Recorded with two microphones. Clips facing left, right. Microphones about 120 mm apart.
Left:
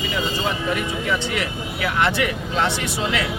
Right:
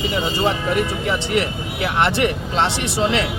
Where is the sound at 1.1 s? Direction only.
25° right (ahead or behind).